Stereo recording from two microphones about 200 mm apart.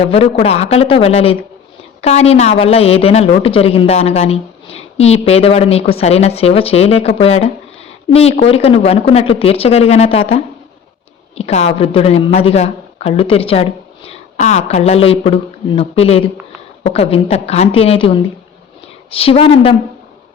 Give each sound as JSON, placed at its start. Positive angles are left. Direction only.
{"t": 0.0, "sound": "a woman's voice", "side_deg": 30}